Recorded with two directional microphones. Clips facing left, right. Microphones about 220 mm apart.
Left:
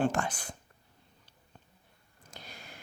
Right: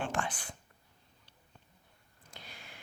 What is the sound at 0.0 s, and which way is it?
Speech, 40° left (ahead or behind).